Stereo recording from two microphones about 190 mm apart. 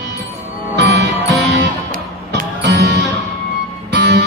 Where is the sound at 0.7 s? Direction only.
65° right (ahead or behind).